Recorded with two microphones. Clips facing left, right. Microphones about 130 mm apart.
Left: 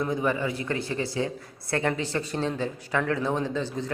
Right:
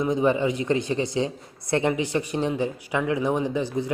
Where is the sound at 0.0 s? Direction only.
20° right (ahead or behind).